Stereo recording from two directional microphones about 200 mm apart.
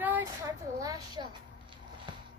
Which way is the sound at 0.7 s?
20° right (ahead or behind).